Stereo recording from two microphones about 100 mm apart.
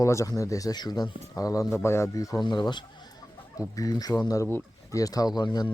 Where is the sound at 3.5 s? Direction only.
35° left (ahead or behind).